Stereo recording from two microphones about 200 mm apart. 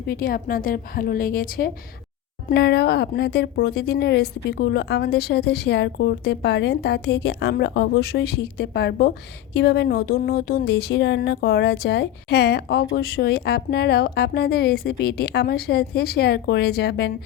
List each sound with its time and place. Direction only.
0.1 s a woman's voice: 50° left (ahead or behind)
2.5 s a woman's voice: 55° left (ahead or behind)